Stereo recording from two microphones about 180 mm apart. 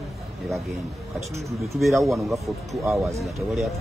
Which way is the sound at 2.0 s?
Centre (ahead or behind).